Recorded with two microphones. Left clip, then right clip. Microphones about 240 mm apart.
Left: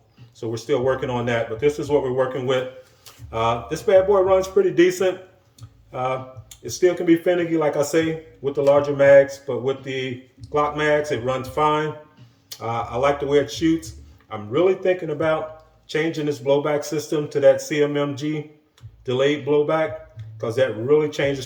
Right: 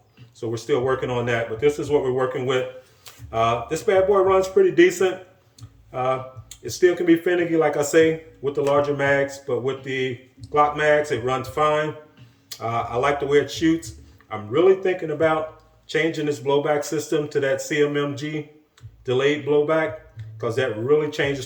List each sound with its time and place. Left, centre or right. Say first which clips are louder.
0.3 s speech: even; centre
5.9 s speech: right 1 dB; centre